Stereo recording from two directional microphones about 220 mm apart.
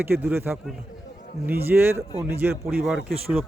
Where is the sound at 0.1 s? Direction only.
10° right (ahead or behind).